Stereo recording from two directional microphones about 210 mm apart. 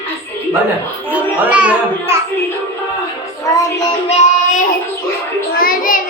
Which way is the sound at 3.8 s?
30° left (ahead or behind).